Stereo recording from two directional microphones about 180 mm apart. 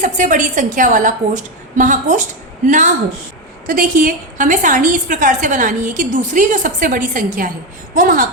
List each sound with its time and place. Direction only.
0.0 s a woman's voice: 45° right (ahead or behind)